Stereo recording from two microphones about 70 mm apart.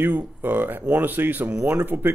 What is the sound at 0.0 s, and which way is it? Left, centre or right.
Speech, right.